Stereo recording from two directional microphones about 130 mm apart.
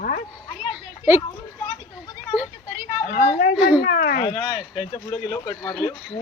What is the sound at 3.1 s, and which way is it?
Speech, 90° left.